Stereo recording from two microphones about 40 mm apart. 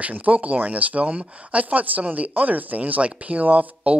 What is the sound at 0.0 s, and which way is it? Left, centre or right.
Speech, right.